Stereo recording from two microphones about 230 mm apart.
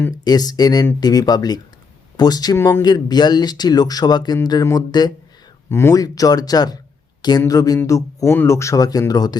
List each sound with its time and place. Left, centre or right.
0.0 s speech: centre